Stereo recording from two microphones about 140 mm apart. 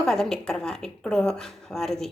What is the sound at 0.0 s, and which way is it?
A woman's voice, centre (ahead or behind).